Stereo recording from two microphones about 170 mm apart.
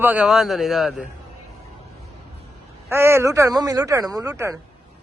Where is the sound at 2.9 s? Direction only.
15° right (ahead or behind).